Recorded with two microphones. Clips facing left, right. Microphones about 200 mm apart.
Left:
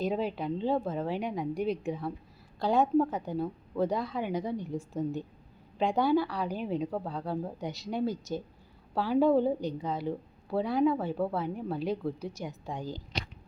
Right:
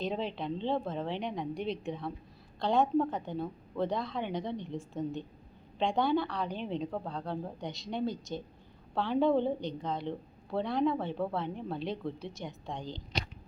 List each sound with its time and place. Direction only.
0.0 s a woman's voice: 5° left (ahead or behind)
5.8 s a woman's voice: 5° left (ahead or behind)